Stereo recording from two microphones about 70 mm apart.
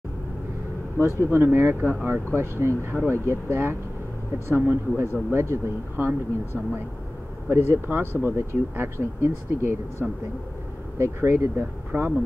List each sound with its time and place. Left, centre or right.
0.9 s speech: right
10.0 s speech: right
11.0 s speech: right